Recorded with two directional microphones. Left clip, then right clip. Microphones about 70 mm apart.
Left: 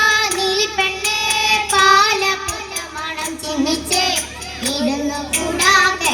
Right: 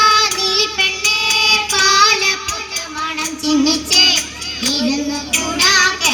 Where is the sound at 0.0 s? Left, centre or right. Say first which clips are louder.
Right 3 dB; left.